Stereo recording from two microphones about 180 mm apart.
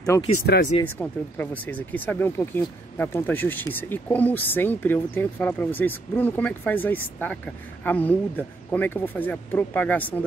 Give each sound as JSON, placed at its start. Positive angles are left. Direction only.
{"t": 0.1, "sound": "speech", "side_deg": 20}
{"t": 0.8, "sound": "speech", "side_deg": 10}